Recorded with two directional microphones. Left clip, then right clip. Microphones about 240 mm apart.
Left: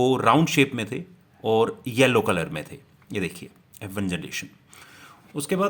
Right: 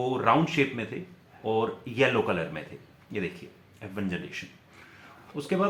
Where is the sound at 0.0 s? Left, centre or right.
Left.